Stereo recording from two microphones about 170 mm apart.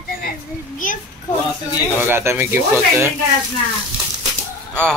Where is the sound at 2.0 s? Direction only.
15° right (ahead or behind).